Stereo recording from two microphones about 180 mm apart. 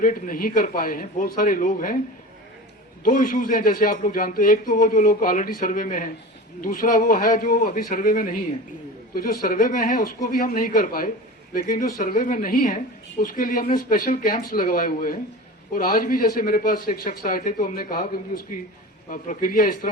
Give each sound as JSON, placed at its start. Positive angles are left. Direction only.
{"t": 0.0, "sound": "a woman's voice", "side_deg": 50}
{"t": 3.0, "sound": "a woman's voice", "side_deg": 50}